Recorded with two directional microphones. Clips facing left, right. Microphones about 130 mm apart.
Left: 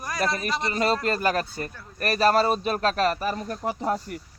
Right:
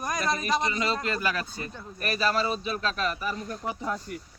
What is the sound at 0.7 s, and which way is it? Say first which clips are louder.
A man's voice: left 5 dB; 50° left (ahead or behind).